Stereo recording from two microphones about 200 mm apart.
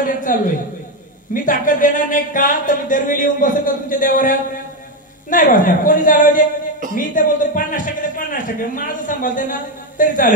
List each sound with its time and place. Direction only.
0.0 s a man's voice: 45° left (ahead or behind)